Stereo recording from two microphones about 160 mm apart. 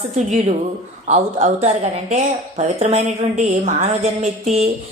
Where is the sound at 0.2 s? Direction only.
50° right (ahead or behind).